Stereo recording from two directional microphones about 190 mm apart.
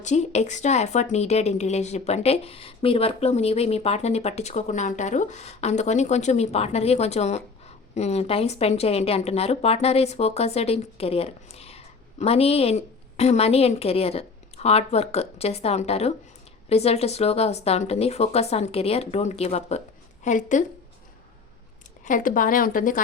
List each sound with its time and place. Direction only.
0.0 s speech: 35° left (ahead or behind)
22.0 s speech: 45° left (ahead or behind)